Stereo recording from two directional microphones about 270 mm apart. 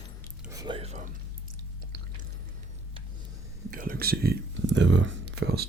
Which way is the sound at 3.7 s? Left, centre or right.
Right.